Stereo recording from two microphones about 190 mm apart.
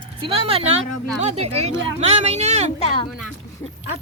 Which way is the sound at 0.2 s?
30° right (ahead or behind).